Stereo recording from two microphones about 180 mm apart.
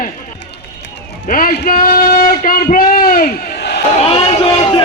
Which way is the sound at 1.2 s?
50° left (ahead or behind).